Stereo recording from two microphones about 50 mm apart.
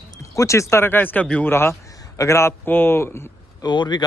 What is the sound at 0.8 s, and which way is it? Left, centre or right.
Speech, left.